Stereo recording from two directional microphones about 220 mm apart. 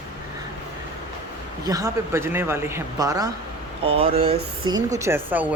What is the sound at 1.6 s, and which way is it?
Speech, 15° right (ahead or behind).